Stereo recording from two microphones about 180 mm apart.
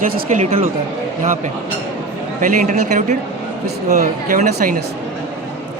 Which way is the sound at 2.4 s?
45° right (ahead or behind).